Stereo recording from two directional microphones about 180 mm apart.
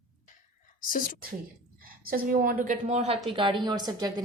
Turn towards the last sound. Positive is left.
turn(degrees=-20)  # may be behind; listen again after turning